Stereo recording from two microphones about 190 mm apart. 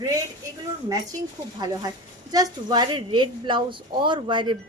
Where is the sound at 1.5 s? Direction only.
20° right (ahead or behind).